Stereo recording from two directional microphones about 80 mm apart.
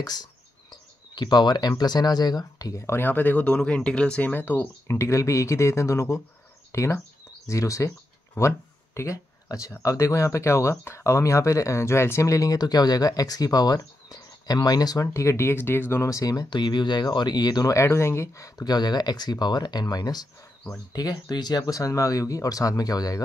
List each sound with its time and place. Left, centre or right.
0.0 s speech: left
3.0 s speech: left
8.4 s a sound: left
9.8 s speech: left
15.1 s speech: left
17.7 s speech: left